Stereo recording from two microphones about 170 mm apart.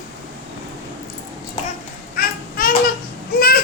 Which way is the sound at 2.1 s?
60° left (ahead or behind).